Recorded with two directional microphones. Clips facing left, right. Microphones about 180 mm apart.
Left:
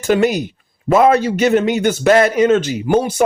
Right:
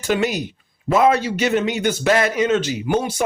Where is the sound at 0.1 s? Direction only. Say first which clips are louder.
Left 6 dB; 50° left (ahead or behind).